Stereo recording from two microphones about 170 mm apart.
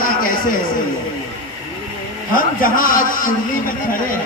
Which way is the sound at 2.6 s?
55° left (ahead or behind).